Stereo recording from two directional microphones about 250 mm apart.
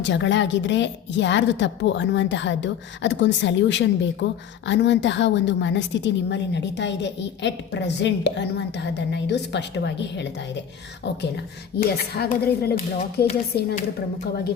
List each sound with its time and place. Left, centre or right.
0.0 s a woman's voice: left